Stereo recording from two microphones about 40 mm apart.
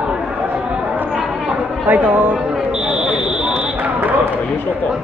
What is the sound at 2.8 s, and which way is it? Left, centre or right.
Fire alarm, right.